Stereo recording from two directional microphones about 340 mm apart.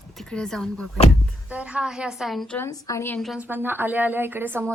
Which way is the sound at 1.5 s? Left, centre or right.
Centre.